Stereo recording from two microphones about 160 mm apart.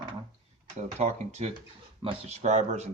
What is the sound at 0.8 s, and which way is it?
Speech, 50° right (ahead or behind).